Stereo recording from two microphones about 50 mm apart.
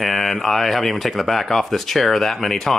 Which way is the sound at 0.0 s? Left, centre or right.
Centre.